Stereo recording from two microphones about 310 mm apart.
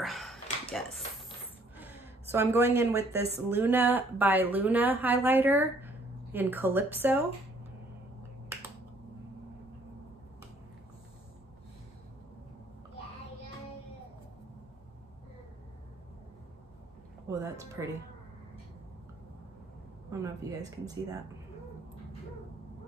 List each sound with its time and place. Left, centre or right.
0.0 s a sound: centre
1.8 s a woman's voice: centre
17.3 s music: centre
20.1 s speech: centre